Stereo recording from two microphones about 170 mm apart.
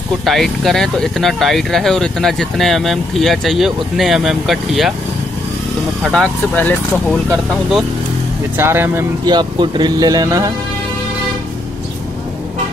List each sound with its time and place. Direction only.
0.2 s speech: centre (ahead or behind)
6.1 s speech: 10° left (ahead or behind)
8.5 s speech: 15° right (ahead or behind)
9.2 s speech: 25° right (ahead or behind)